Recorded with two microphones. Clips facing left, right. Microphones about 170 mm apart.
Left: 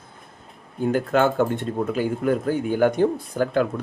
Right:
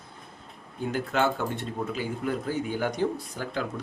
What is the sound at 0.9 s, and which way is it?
Speech, 50° left (ahead or behind).